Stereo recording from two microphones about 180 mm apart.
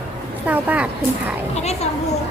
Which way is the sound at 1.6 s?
35° left (ahead or behind).